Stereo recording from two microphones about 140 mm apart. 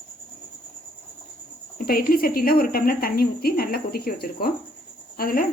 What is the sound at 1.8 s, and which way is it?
Speech, 90° left.